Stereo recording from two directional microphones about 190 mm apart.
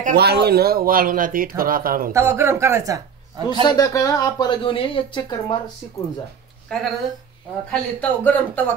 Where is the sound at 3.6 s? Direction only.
20° left (ahead or behind).